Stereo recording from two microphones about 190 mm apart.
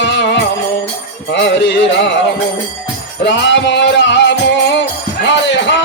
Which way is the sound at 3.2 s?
70° left (ahead or behind).